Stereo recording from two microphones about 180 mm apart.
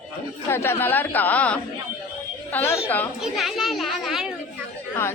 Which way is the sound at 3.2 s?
Centre (ahead or behind).